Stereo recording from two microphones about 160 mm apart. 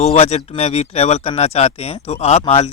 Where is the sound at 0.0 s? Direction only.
40° left (ahead or behind).